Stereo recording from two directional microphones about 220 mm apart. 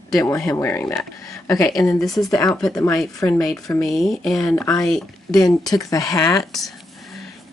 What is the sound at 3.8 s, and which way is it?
Speech, centre (ahead or behind).